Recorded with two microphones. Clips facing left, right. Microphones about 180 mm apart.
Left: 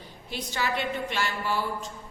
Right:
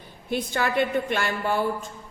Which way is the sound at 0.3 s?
55° right (ahead or behind).